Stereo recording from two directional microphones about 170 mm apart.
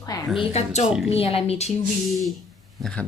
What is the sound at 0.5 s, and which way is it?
Speech, 40° left (ahead or behind).